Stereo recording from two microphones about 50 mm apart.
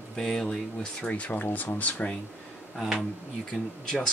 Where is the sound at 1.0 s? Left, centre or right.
Left.